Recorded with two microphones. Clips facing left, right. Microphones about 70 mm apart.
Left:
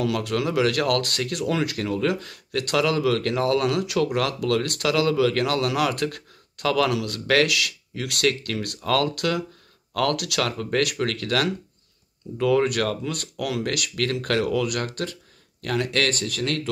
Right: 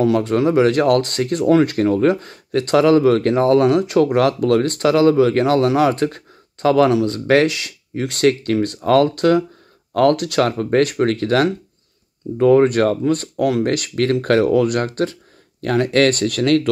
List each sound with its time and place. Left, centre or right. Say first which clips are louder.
0.0 s speech: right 8 dB; right